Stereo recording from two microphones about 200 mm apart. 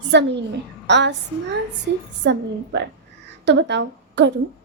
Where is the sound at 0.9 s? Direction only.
60° right (ahead or behind).